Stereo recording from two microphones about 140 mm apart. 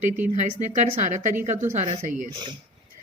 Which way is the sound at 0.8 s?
55° right (ahead or behind).